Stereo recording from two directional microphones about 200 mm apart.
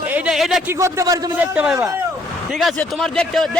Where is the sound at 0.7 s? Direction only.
15° right (ahead or behind).